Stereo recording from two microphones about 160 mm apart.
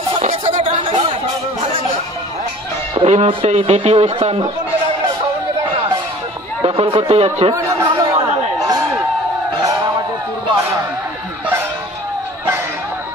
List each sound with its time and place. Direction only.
0.2 s chatter: 45° right (ahead or behind)
2.9 s speech: 40° right (ahead or behind)
6.6 s speech: 35° right (ahead or behind)
7.5 s chatter: 20° right (ahead or behind)